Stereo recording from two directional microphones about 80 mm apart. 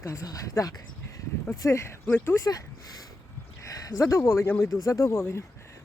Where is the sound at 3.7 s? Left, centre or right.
Left.